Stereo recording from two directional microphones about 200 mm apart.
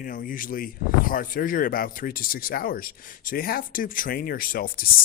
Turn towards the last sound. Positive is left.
turn(degrees=45)  # may be behind; listen again after turning